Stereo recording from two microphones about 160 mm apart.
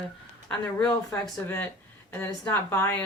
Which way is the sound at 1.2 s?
10° left (ahead or behind).